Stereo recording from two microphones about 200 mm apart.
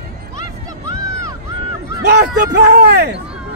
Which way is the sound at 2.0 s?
60° right (ahead or behind).